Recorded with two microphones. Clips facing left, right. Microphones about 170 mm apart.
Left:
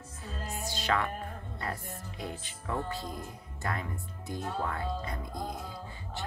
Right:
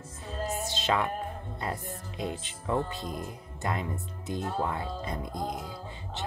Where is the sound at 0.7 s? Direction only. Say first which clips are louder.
Right 1 dB; 20° right (ahead or behind).